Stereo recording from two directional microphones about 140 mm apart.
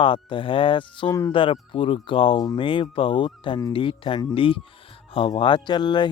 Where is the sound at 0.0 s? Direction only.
35° left (ahead or behind).